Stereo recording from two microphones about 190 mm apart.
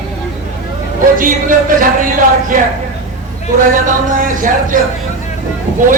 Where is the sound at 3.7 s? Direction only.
45° right (ahead or behind).